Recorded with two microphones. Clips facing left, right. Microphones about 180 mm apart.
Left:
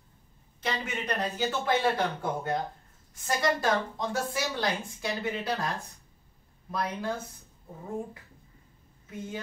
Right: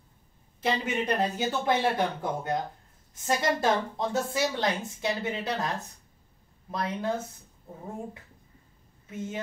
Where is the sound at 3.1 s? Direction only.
20° right (ahead or behind).